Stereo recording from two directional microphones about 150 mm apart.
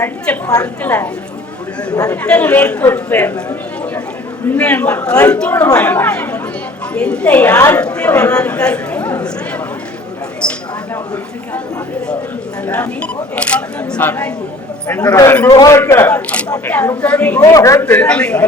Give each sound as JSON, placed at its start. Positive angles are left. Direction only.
{"t": 0.0, "sound": "a woman's voice", "side_deg": 20}
{"t": 4.4, "sound": "a woman's voice", "side_deg": 10}
{"t": 10.4, "sound": "a sound", "side_deg": 5}
{"t": 12.6, "sound": "a woman's voice", "side_deg": 10}
{"t": 17.4, "sound": "a woman's voice", "side_deg": 20}
{"t": 17.8, "sound": "a woman's voice", "side_deg": 10}